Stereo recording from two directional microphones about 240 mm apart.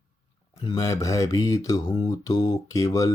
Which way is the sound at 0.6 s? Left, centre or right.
Centre.